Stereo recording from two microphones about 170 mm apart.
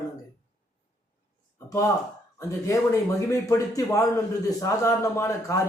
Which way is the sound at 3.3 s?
20° left (ahead or behind).